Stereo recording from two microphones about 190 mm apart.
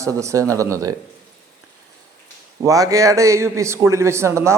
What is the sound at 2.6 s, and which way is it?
A man's voice, 15° right (ahead or behind).